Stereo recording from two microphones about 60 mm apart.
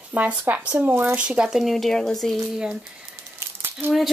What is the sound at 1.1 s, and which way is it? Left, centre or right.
Speech, centre.